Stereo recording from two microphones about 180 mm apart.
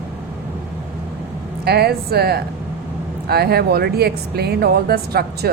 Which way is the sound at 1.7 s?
60° right (ahead or behind).